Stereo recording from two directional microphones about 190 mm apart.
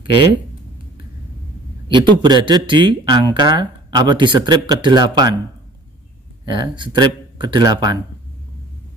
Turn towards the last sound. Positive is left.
turn(degrees=-20)  # may be behind; listen again after turning